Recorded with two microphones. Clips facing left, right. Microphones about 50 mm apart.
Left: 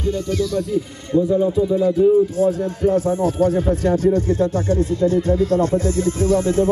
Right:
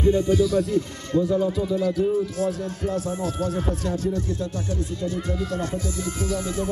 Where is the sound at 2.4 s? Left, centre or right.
Left.